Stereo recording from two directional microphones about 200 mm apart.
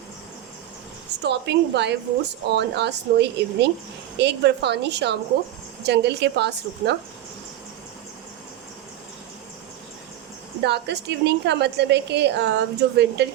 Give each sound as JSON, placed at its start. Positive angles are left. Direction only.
{"t": 1.2, "sound": "a woman's voice", "side_deg": -55}
{"t": 10.6, "sound": "a woman's voice", "side_deg": -55}